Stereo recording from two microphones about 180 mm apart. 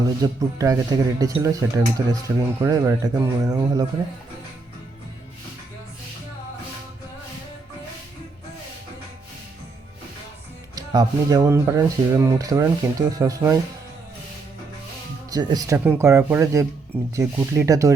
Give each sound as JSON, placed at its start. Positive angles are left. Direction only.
{"t": 0.2, "sound": "speech", "side_deg": -20}
{"t": 10.8, "sound": "speech", "side_deg": -20}
{"t": 15.3, "sound": "speech", "side_deg": -20}